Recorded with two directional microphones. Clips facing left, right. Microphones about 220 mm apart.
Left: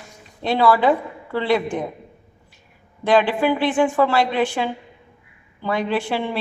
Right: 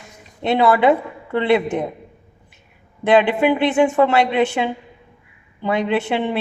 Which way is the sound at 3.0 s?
20° right (ahead or behind).